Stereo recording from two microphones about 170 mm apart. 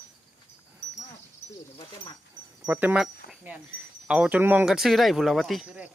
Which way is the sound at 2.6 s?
10° right (ahead or behind).